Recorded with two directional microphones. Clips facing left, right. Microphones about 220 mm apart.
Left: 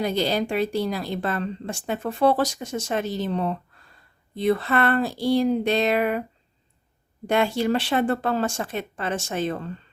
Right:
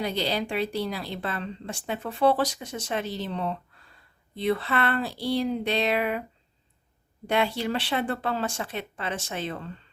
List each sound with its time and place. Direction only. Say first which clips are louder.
0.0 s speech: left 4 dB; 45° left (ahead or behind)
7.3 s speech: left 4 dB; 45° left (ahead or behind)